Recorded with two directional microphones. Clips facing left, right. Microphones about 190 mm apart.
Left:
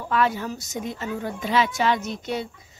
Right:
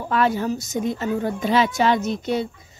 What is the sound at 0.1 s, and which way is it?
Speech, 35° right (ahead or behind).